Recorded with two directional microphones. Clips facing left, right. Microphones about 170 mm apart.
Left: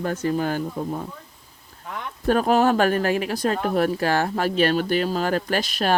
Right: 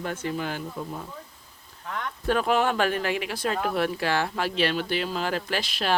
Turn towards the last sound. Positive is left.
turn(degrees=45)  # may be behind; listen again after turning